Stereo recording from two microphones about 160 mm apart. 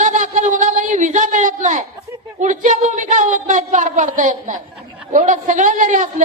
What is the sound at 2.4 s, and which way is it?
A woman's voice, 50° right (ahead or behind).